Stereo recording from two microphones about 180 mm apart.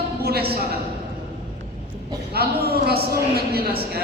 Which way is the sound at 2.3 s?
60° right (ahead or behind).